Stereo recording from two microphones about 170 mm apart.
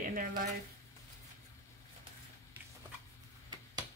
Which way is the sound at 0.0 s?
50° right (ahead or behind).